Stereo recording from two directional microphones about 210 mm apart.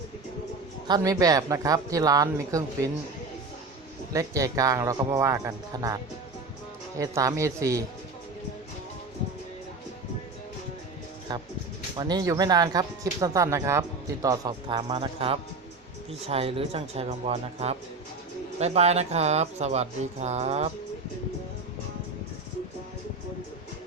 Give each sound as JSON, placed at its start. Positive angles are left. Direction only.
{"t": 0.9, "sound": "speech", "side_deg": -20}
{"t": 4.1, "sound": "speech", "side_deg": -15}
{"t": 11.3, "sound": "speech", "side_deg": -20}